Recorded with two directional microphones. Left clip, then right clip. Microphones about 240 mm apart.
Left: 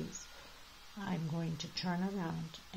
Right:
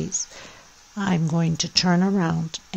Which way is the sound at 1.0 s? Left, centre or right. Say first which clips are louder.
Right 16 dB; right.